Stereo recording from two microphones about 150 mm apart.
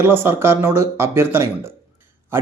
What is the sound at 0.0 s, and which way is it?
Speech, 15° right (ahead or behind).